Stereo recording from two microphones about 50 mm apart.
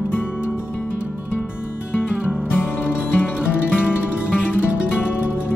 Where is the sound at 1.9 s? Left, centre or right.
Left.